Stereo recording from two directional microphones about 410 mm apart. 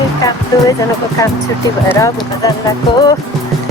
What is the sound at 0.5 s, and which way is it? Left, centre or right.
Speech, centre.